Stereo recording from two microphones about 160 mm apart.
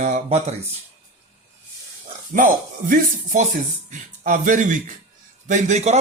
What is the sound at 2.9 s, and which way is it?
A man's voice, 50° right (ahead or behind).